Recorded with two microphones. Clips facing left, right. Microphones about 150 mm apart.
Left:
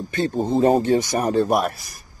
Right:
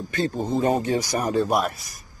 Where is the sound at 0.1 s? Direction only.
25° left (ahead or behind).